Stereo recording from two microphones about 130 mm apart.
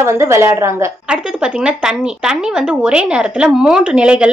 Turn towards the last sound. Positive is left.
turn(degrees=-10)  # may be behind; listen again after turning